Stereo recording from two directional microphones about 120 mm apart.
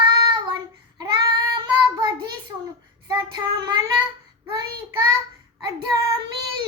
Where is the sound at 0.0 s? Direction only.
40° right (ahead or behind).